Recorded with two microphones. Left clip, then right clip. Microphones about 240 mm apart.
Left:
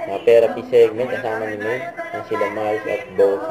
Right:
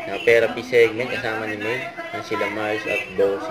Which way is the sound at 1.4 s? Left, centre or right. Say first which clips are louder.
Left 2 dB; centre.